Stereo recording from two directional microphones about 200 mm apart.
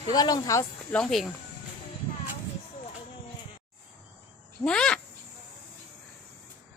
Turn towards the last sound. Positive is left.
turn(degrees=5)  # may be behind; listen again after turning